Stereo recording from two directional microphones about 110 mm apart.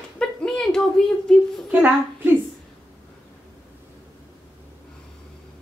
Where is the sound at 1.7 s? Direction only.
15° right (ahead or behind).